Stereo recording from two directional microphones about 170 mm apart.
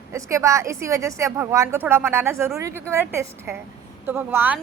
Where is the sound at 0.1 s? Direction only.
15° right (ahead or behind).